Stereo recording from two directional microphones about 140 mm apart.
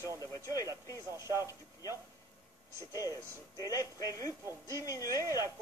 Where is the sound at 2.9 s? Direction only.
25° left (ahead or behind).